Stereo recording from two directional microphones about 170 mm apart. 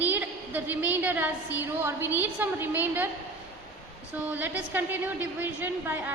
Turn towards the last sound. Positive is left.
turn(degrees=-10)  # may be behind; listen again after turning